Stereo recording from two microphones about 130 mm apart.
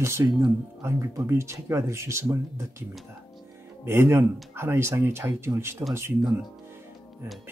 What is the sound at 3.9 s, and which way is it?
Speech, 20° right (ahead or behind).